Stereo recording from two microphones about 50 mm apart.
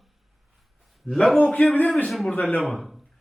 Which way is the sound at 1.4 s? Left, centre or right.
Left.